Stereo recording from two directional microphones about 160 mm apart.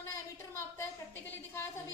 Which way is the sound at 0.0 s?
15° left (ahead or behind).